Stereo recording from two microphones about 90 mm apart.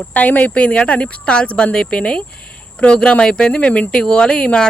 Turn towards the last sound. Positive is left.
turn(degrees=10)  # may be behind; listen again after turning